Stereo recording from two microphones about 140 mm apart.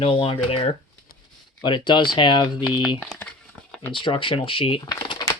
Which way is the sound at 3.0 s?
5° left (ahead or behind).